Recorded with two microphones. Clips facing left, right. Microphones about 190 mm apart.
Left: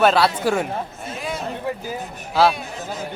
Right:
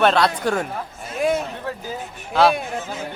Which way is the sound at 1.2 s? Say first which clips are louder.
Right 9 dB; 55° right (ahead or behind).